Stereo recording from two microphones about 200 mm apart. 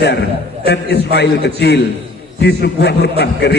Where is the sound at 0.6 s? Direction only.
55° left (ahead or behind).